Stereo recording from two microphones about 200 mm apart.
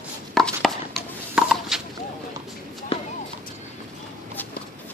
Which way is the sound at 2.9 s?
30° left (ahead or behind).